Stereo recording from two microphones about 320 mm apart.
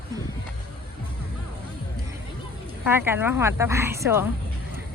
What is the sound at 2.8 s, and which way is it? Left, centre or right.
A woman's voice, centre.